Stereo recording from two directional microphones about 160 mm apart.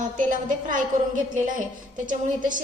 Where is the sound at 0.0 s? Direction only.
55° right (ahead or behind).